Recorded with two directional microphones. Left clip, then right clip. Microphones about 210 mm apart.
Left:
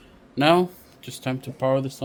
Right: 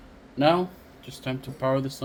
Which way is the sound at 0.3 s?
55° left (ahead or behind).